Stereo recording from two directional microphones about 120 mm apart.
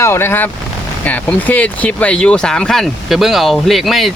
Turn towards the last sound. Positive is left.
turn(degrees=0)  # may be behind; listen again after turning